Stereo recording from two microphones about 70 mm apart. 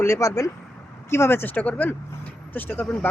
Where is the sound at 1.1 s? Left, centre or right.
Left.